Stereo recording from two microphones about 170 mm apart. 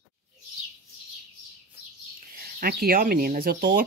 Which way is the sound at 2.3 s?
60° right (ahead or behind).